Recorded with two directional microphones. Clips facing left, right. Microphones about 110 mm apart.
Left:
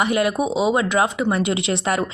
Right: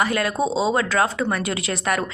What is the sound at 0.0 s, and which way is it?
A woman's voice, 20° left (ahead or behind).